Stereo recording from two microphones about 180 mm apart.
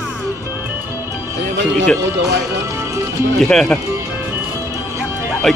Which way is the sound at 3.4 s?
5° left (ahead or behind).